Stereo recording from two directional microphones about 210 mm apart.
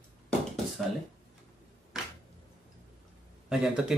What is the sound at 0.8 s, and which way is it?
Speech, centre (ahead or behind).